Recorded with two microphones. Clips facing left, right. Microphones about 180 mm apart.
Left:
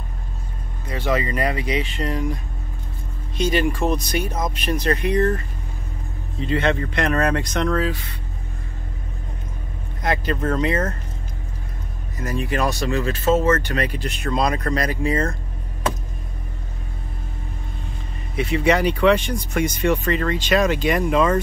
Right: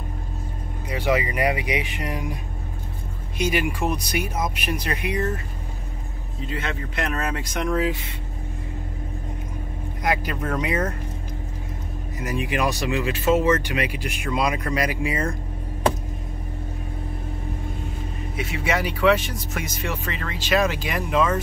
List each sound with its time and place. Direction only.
0.8 s speech: 10° right (ahead or behind)
6.4 s speech: 5° right (ahead or behind)
10.0 s speech: 10° right (ahead or behind)
12.2 s speech: 15° right (ahead or behind)
13.2 s speech: 40° left (ahead or behind)
13.5 s speech: 15° right (ahead or behind)
18.3 s speech: 5° right (ahead or behind)